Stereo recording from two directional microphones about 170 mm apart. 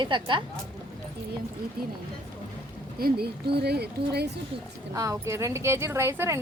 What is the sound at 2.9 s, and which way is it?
Speech, 65° right (ahead or behind).